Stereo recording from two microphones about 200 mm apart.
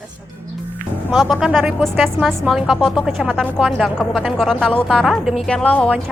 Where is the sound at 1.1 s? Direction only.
Centre (ahead or behind).